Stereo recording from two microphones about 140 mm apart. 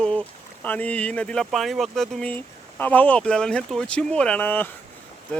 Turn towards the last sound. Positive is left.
turn(degrees=15)  # may be behind; listen again after turning